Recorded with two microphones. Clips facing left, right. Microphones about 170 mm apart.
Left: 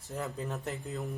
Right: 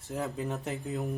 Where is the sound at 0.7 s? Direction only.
15° right (ahead or behind).